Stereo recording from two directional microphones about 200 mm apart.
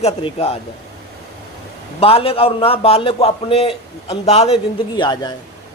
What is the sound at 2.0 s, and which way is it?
A man's voice, 30° left (ahead or behind).